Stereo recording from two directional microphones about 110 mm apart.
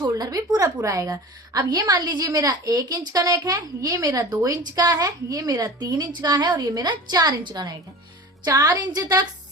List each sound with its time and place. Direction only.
0.0 s a woman's voice: 35° right (ahead or behind)